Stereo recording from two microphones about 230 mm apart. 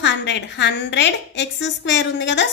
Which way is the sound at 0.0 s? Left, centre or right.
Left.